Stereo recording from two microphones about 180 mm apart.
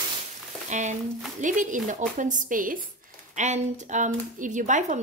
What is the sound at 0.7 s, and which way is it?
Speech, 40° right (ahead or behind).